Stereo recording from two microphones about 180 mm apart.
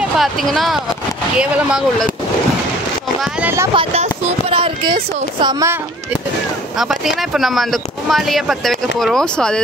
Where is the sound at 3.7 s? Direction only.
30° right (ahead or behind).